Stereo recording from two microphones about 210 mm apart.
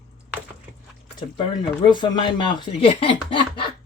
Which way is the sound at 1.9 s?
20° left (ahead or behind).